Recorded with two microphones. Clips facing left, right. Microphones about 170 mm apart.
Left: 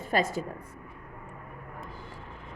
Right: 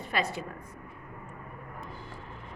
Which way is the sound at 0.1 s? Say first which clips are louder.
Left 4 dB; 45° left (ahead or behind).